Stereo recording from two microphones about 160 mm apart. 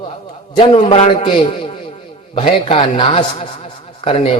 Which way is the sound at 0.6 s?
40° left (ahead or behind).